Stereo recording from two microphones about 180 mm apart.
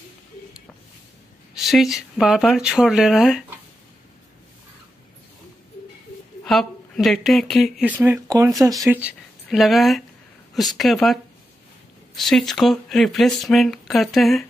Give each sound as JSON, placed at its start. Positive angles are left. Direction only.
{"t": 1.5, "sound": "speech", "side_deg": 0}
{"t": 6.4, "sound": "speech", "side_deg": 0}
{"t": 8.0, "sound": "speech", "side_deg": -15}
{"t": 8.9, "sound": "speech", "side_deg": -5}
{"t": 12.2, "sound": "speech", "side_deg": 0}